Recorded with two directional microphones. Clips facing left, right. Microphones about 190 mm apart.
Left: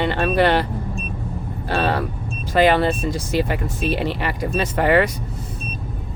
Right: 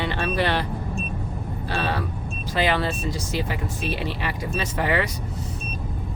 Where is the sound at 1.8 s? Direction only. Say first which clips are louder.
Left 6 dB; 55° left (ahead or behind).